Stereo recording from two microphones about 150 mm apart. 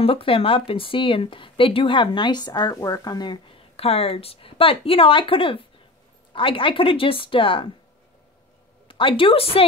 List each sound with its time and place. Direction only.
0.0 s speech: 40° left (ahead or behind)
8.8 s a woman's voice: 35° left (ahead or behind)